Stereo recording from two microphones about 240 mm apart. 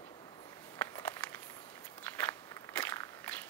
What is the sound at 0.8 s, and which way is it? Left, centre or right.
Walk, centre.